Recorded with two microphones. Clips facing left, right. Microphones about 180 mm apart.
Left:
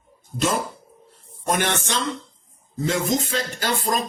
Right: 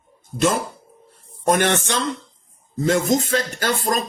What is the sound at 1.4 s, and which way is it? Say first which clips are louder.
Speech: right 5 dB; 55° right (ahead or behind).